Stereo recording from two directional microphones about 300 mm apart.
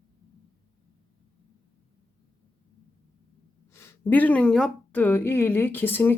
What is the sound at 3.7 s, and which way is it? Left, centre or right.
Speech, centre.